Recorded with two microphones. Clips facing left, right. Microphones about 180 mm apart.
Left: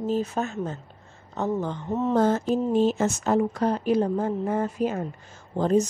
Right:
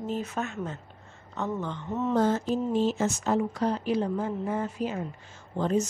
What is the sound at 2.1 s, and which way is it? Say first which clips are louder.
Speech: left 3 dB; 50° left (ahead or behind).